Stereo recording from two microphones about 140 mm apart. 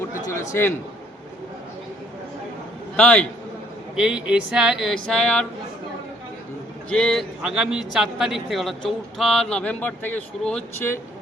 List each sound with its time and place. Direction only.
0.1 s a sound: 70° left (ahead or behind)
0.3 s a man's voice: 20° left (ahead or behind)
2.9 s a man's voice: 10° left (ahead or behind)
3.9 s a man's voice: 5° right (ahead or behind)
6.9 s a man's voice: 5° left (ahead or behind)